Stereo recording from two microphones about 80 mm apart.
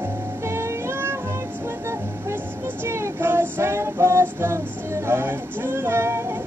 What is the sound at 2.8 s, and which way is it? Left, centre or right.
Child singing, right.